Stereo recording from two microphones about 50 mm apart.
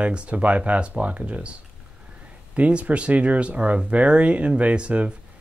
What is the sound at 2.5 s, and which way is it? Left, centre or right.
Speech, right.